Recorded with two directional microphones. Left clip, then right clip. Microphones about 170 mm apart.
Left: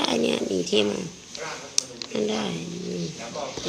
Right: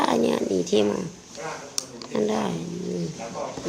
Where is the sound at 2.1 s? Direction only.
5° right (ahead or behind).